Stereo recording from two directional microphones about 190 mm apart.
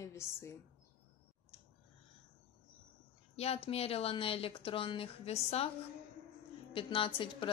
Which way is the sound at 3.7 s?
30° left (ahead or behind).